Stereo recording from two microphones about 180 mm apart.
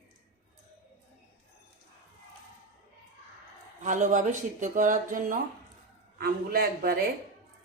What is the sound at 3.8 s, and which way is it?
A man's voice, 45° right (ahead or behind).